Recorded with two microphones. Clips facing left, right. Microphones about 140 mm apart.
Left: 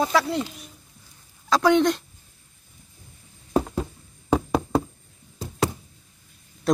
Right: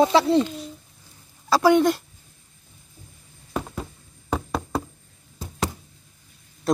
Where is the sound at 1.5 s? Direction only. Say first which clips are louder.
Right 1 dB; 5° right (ahead or behind).